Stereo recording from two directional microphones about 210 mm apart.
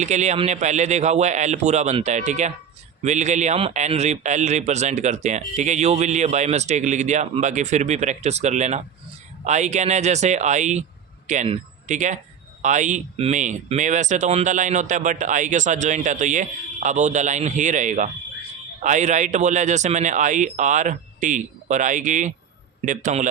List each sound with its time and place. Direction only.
0.0 s speech: 35° right (ahead or behind)